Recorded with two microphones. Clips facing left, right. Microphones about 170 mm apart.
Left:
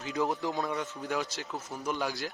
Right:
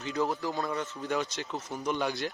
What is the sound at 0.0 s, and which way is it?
Speech, 5° left (ahead or behind).